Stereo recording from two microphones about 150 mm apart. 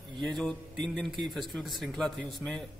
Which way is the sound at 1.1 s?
30° right (ahead or behind).